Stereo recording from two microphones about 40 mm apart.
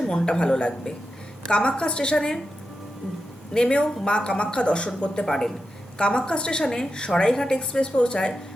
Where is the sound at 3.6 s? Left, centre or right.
Left.